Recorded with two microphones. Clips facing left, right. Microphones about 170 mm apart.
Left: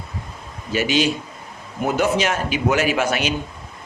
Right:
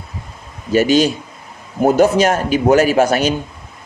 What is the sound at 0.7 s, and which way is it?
A man's voice, 40° right (ahead or behind).